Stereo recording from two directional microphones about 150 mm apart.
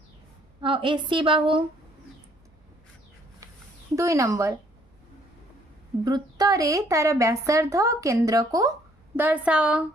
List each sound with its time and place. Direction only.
0.6 s a woman's voice: 35° right (ahead or behind)
3.9 s a woman's voice: 20° right (ahead or behind)
6.1 s a woman's voice: 25° right (ahead or behind)
9.1 s a woman's voice: 10° right (ahead or behind)